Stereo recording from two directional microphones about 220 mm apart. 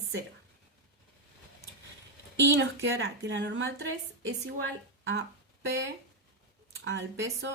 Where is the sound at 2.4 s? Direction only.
55° right (ahead or behind).